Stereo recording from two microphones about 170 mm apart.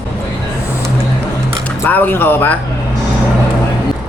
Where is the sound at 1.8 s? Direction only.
10° left (ahead or behind).